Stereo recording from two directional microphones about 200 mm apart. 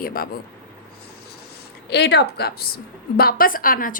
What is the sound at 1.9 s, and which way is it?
A woman's voice, 55° left (ahead or behind).